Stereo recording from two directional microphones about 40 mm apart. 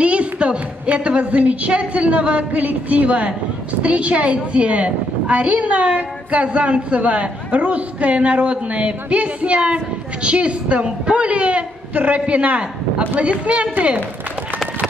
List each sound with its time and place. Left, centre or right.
0.0 s a woman's voice: right